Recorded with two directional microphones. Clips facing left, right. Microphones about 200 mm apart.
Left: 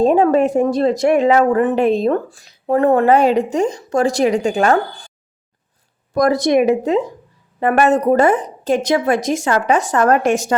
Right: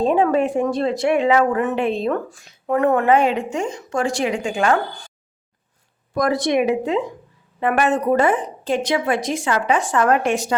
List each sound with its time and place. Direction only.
0.0 s speech: 40° left (ahead or behind)
6.1 s speech: 40° left (ahead or behind)